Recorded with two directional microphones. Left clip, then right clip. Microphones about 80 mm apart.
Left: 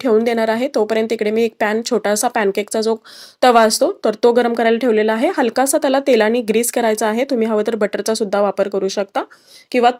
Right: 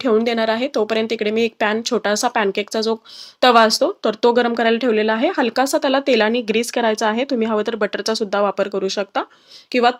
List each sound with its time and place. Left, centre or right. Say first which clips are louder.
0.0 s speech: left 2 dB; left